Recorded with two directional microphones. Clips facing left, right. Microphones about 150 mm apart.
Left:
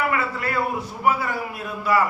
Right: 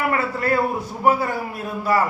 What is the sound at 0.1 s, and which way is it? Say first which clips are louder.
A man's voice: right 4 dB; 40° right (ahead or behind).